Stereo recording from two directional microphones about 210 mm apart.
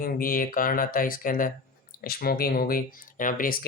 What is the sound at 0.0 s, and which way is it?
Speech, 45° left (ahead or behind).